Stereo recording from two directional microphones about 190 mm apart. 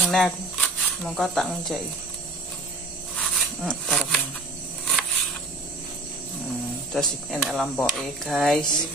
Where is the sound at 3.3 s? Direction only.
5° left (ahead or behind).